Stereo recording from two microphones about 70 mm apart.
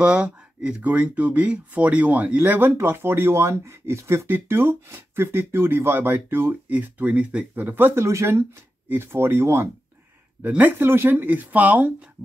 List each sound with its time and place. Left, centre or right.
0.0 s speech: centre
7.6 s speech: right
10.4 s speech: right